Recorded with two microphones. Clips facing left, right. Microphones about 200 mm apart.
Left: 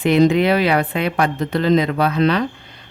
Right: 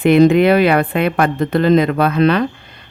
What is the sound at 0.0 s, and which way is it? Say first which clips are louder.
Speech: right 4 dB; 55° right (ahead or behind).